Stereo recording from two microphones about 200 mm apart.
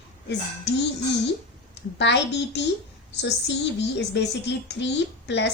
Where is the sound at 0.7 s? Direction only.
60° left (ahead or behind).